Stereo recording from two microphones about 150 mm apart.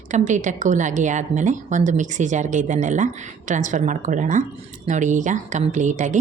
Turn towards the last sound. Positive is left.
turn(degrees=-55)  # may be behind; listen again after turning